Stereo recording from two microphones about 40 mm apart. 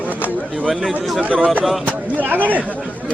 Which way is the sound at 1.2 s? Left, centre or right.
Right.